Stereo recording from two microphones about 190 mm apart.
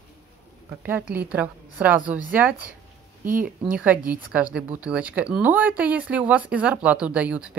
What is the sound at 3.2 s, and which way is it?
Speech, 45° right (ahead or behind).